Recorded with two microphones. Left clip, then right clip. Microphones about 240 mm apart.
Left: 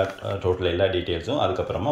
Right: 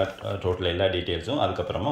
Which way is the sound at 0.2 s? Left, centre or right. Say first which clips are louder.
Left 3 dB; centre.